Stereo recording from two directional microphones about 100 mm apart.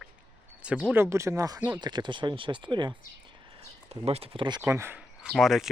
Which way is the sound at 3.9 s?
90° right.